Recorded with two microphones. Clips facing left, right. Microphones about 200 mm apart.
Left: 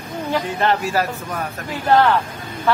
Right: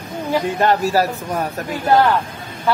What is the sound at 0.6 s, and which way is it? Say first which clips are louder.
A man's voice: right 4 dB; 40° right (ahead or behind).